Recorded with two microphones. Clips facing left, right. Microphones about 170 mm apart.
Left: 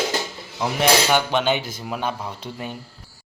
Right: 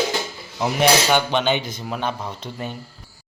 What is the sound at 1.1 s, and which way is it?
Speech, 5° left (ahead or behind).